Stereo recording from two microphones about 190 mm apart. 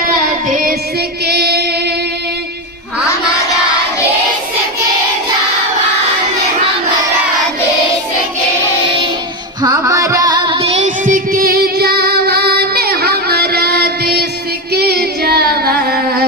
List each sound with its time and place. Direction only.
0.5 s child singing: 45° right (ahead or behind)
1.2 s child singing: 60° right (ahead or behind)
9.6 s music: 20° right (ahead or behind); by 14.3 s 55° right (ahead or behind)
14.7 s a sound: 55° right (ahead or behind)